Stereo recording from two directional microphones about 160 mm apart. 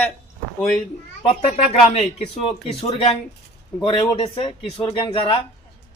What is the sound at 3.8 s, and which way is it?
Speech, 30° left (ahead or behind).